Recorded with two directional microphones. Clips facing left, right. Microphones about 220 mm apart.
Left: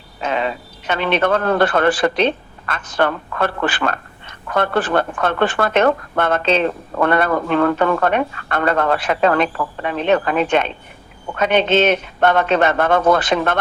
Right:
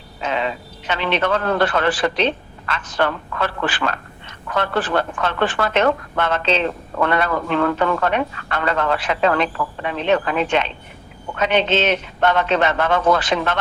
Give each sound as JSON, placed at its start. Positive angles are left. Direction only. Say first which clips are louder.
{"t": 0.2, "sound": "speech", "louder": "left 2 dB", "side_deg": 45}